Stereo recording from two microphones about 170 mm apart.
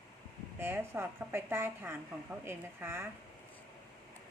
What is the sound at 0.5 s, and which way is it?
A woman's voice, 15° right (ahead or behind).